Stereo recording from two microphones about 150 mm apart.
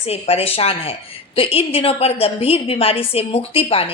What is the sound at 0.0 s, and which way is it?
A woman's voice, 45° left (ahead or behind).